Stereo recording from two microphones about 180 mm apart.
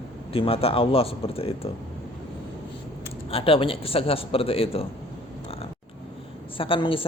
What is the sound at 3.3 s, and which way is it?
Speech, 30° left (ahead or behind).